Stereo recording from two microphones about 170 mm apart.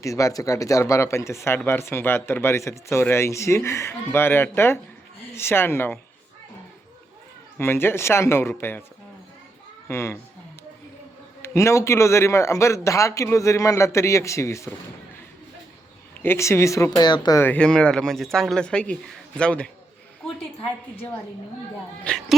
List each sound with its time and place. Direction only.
0.0 s speech: 20° left (ahead or behind)
7.6 s speech: 15° left (ahead or behind)
9.9 s speech: 15° left (ahead or behind)
11.4 s speech: 15° left (ahead or behind)
16.2 s speech: 15° left (ahead or behind)
17.4 s speech: 5° left (ahead or behind)
20.2 s a sound: 5° left (ahead or behind)
22.0 s speech: 5° left (ahead or behind)